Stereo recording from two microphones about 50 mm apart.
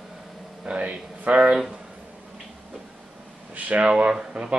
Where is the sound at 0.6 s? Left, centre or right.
Right.